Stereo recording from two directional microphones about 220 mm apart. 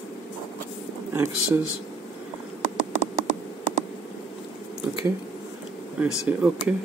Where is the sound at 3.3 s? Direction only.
35° left (ahead or behind).